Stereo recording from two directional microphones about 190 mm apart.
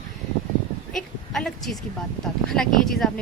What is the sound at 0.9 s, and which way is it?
A woman's voice, centre (ahead or behind).